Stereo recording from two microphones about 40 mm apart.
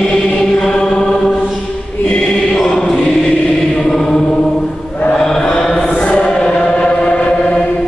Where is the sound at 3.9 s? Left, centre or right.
Centre; by 7.5 s left.